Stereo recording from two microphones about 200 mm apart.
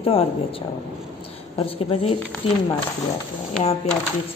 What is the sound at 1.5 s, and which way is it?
Speech, 30° left (ahead or behind).